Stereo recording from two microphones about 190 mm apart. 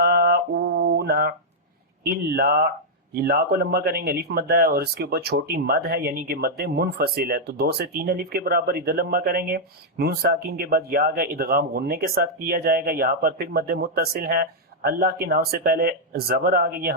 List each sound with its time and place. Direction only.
0.0 s mantra: 55° right (ahead or behind)
2.0 s speech: 55° right (ahead or behind)